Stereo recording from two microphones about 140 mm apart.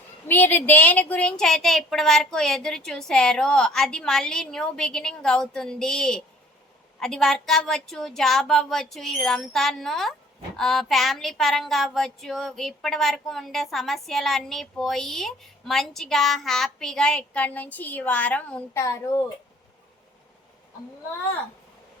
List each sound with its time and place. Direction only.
0.3 s speech: 15° left (ahead or behind)
18.8 s a child's voice: 20° left (ahead or behind)